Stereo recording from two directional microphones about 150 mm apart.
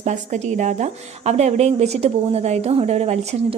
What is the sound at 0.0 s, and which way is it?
A woman's voice, 50° right (ahead or behind).